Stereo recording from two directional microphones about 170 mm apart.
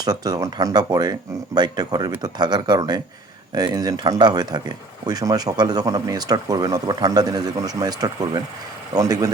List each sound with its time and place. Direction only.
0.0 s speech: 25° right (ahead or behind)